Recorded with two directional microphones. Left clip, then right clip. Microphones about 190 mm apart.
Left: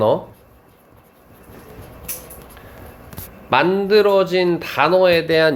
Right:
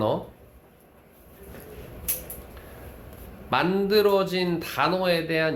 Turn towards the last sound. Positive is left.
turn(degrees=35)  # may be behind; listen again after turning